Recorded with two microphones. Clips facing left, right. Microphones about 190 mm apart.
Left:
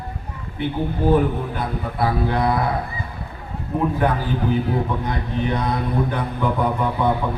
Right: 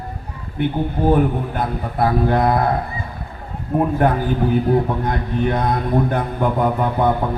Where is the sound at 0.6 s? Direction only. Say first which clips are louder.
Right 3 dB; 50° right (ahead or behind).